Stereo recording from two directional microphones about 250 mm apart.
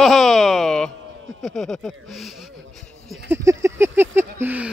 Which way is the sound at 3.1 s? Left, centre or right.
Centre.